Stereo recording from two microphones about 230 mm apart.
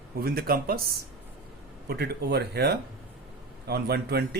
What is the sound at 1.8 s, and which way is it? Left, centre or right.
Speech, right.